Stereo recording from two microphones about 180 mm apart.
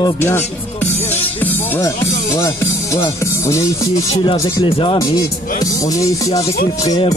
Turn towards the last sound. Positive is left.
turn(degrees=20)  # may be behind; listen again after turning